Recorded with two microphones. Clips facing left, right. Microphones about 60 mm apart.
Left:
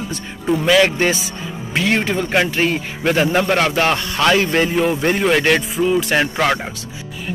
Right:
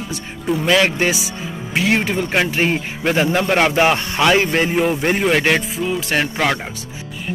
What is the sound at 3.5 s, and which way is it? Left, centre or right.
Speech, centre.